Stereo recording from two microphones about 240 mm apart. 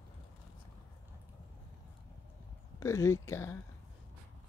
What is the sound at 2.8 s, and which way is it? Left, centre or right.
Speech, centre.